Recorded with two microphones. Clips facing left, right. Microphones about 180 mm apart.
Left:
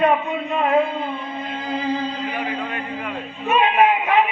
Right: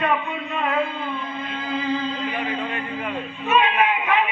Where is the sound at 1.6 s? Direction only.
35° left (ahead or behind).